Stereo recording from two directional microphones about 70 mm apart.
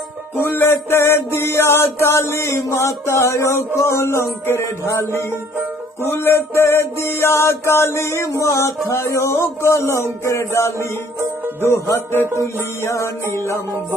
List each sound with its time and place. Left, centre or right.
0.4 s mantra: left
6.0 s mantra: left
12.8 s music: left